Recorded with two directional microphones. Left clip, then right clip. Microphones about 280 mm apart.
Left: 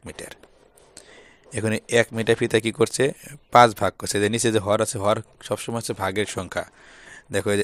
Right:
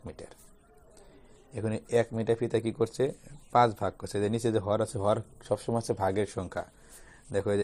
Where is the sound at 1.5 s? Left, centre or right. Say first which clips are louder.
Left 7 dB; left.